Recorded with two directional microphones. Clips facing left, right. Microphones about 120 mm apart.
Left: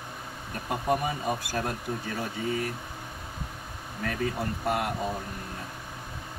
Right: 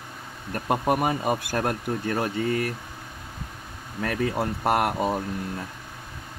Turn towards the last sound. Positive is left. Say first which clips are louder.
# right 6 dB
turn(degrees=-75)  # may be behind; listen again after turning